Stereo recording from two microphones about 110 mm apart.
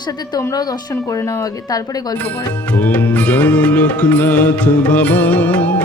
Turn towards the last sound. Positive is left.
turn(degrees=15)  # may be behind; listen again after turning